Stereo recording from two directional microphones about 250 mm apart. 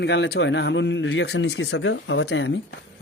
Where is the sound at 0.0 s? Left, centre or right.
Left.